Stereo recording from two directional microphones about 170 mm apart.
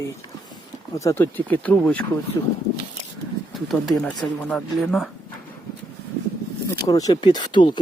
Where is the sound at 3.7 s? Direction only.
Centre (ahead or behind).